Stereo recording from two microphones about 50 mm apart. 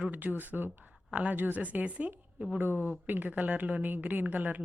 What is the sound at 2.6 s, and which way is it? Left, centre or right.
A woman's voice, right.